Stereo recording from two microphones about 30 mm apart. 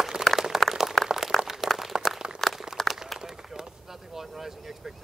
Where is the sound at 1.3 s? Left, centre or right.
Centre.